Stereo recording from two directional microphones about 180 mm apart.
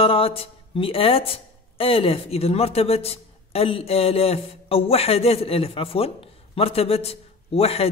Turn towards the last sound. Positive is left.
turn(degrees=35)  # may be behind; listen again after turning